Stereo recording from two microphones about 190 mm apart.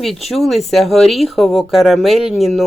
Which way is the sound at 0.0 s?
Centre (ahead or behind).